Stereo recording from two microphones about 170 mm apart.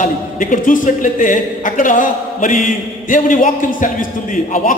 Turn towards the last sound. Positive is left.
turn(degrees=50)  # may be behind; listen again after turning